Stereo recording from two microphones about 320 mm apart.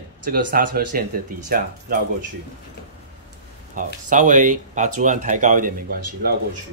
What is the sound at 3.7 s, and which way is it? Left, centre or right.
Speech, right.